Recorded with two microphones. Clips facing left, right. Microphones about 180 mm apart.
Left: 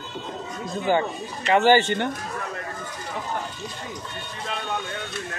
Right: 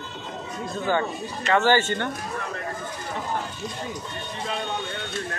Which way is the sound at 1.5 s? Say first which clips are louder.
Left 3 dB; 15° left (ahead or behind).